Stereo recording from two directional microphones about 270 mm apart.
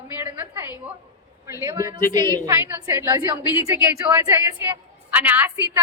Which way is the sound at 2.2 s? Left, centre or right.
Centre.